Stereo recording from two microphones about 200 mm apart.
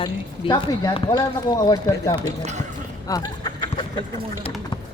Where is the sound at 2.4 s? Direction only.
35° right (ahead or behind).